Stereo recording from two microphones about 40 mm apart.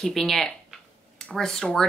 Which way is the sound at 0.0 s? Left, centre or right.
Centre.